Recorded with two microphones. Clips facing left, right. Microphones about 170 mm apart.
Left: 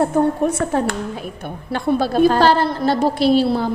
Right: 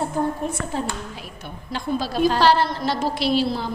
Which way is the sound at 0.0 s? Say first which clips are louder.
Left 7 dB; 70° left (ahead or behind).